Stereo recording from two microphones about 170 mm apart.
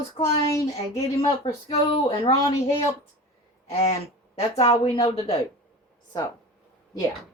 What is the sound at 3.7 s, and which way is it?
Speech, 40° left (ahead or behind).